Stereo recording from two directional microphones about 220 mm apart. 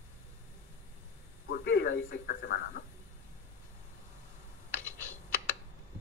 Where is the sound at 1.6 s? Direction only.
45° left (ahead or behind).